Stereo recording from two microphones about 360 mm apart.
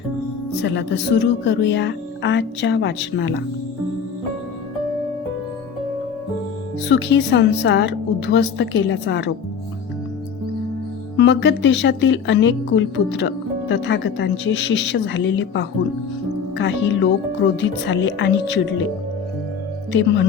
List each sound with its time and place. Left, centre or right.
0.6 s a woman's voice: left
6.8 s a woman's voice: left
11.2 s a woman's voice: left
19.9 s a woman's voice: left